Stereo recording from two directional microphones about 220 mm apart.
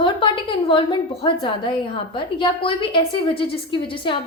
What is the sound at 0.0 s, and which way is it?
A woman's voice, 20° left (ahead or behind).